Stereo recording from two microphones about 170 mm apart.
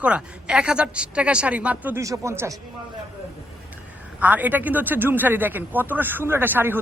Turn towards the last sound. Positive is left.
turn(degrees=-10)  # may be behind; listen again after turning